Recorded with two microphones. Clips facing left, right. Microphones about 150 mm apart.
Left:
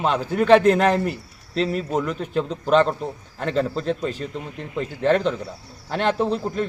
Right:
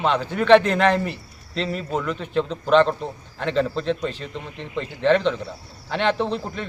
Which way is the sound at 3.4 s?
40° left (ahead or behind).